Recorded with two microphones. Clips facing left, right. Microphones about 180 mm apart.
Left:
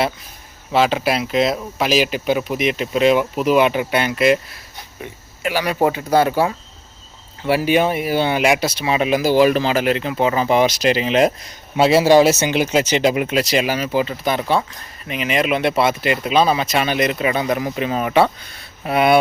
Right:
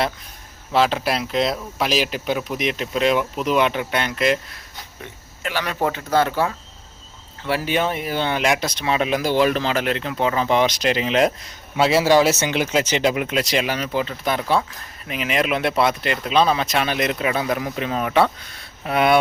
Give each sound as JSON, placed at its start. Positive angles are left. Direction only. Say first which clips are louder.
{"t": 0.7, "sound": "speech", "louder": "left 2 dB", "side_deg": 0}
{"t": 5.4, "sound": "speech", "louder": "left 5 dB", "side_deg": 10}
{"t": 11.9, "sound": "speech", "louder": "left 4 dB", "side_deg": 15}
{"t": 12.6, "sound": "speech", "louder": "left 3 dB", "side_deg": 30}
{"t": 13.3, "sound": "speech", "louder": "left 3 dB", "side_deg": 5}